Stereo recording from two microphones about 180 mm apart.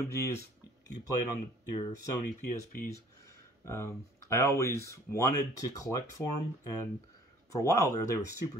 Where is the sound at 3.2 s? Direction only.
15° left (ahead or behind).